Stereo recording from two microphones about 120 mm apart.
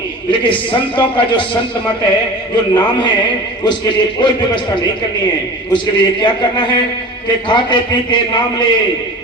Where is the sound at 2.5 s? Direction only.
40° left (ahead or behind).